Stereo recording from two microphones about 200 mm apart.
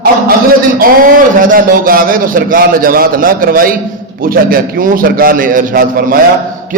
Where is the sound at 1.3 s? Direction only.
45° right (ahead or behind).